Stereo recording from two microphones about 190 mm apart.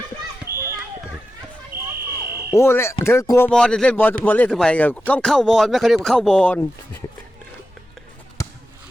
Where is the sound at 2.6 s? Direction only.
15° left (ahead or behind).